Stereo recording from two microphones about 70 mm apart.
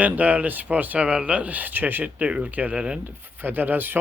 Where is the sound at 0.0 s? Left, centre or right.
Right.